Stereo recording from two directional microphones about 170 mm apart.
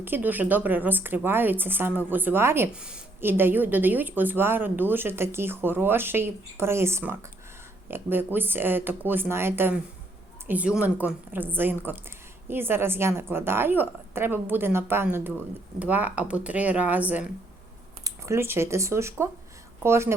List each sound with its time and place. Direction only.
0.0 s a woman's voice: 10° right (ahead or behind)